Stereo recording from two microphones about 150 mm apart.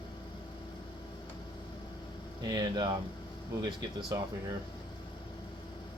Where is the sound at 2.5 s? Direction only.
30° right (ahead or behind).